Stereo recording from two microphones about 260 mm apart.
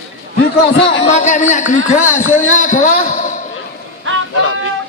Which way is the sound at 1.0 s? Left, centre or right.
Left.